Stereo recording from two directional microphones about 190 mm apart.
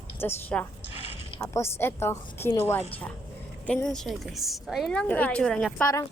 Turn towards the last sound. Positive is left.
turn(degrees=5)  # may be behind; listen again after turning